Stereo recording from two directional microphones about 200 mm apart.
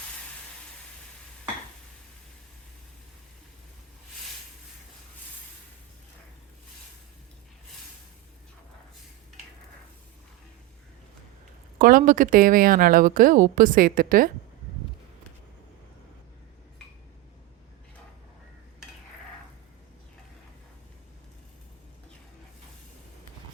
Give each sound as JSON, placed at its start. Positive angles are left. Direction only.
{"t": 11.8, "sound": "a woman's voice", "side_deg": -45}